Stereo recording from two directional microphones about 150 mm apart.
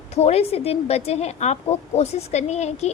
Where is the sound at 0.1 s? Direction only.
45° left (ahead or behind).